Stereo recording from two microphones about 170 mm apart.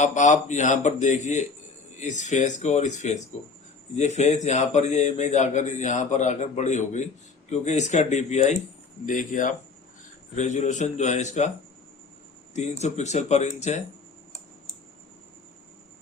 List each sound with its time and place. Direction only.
0.0 s a man's voice: 45° left (ahead or behind)
12.5 s a man's voice: 40° left (ahead or behind)